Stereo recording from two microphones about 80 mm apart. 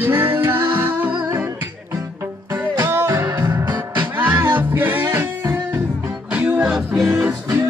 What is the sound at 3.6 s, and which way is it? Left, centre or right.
Music, right.